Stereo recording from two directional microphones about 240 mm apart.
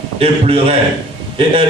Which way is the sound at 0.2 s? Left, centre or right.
Right.